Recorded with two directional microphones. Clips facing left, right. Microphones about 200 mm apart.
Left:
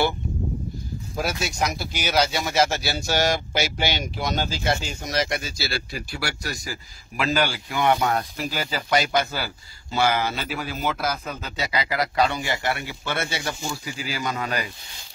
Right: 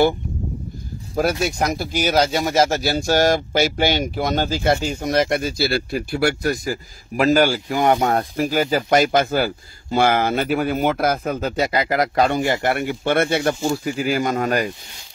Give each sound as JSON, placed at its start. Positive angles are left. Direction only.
{"t": 1.4, "sound": "speech", "side_deg": -50}